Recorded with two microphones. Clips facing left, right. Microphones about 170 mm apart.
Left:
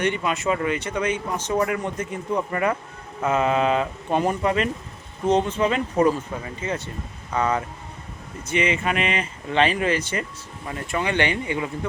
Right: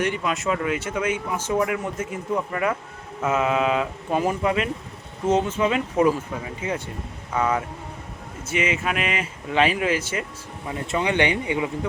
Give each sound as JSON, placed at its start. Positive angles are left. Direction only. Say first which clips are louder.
{"t": 0.0, "sound": "speech", "louder": "left 1 dB", "side_deg": 0}
{"t": 10.8, "sound": "speech", "louder": "right 2 dB", "side_deg": -20}